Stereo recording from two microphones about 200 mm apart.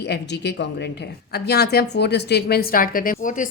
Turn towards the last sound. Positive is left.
turn(degrees=40)  # may be behind; listen again after turning